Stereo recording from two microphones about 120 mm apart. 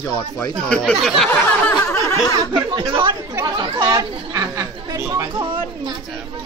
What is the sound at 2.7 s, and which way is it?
Speech, 40° right (ahead or behind).